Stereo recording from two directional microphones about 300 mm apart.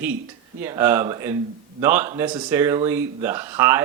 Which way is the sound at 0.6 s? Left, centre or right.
Centre.